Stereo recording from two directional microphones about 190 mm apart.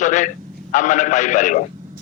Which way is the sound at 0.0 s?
40° left (ahead or behind).